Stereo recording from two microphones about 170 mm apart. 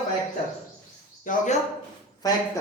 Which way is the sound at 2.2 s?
20° left (ahead or behind).